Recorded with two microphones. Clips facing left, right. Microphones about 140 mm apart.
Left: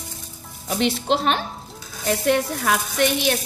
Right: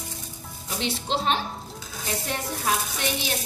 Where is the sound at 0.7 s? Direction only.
70° left (ahead or behind).